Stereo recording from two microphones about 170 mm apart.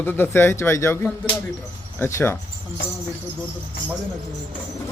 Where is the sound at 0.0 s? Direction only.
10° left (ahead or behind).